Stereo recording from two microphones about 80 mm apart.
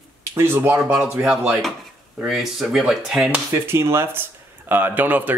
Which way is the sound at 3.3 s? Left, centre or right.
Right.